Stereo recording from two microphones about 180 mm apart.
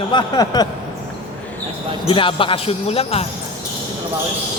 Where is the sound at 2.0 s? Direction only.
30° left (ahead or behind).